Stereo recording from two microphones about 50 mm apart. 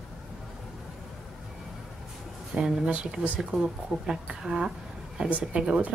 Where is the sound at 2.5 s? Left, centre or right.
Centre.